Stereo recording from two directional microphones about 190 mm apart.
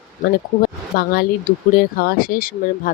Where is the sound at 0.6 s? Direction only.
50° left (ahead or behind).